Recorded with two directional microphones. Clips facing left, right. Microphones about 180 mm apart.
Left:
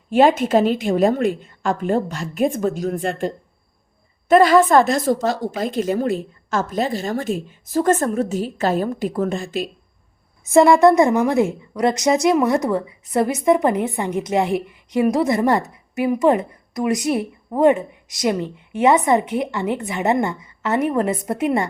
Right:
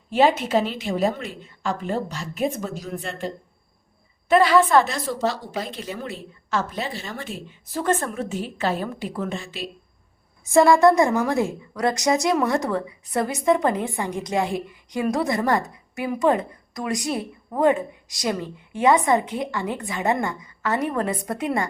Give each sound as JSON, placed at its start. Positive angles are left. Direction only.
{"t": 0.1, "sound": "a woman's voice", "side_deg": 50}
{"t": 10.5, "sound": "a woman's voice", "side_deg": 20}